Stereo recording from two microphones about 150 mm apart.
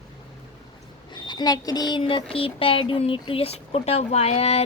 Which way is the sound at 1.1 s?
30° left (ahead or behind).